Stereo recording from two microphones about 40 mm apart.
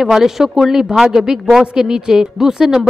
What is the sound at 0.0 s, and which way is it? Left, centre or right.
Speech, centre.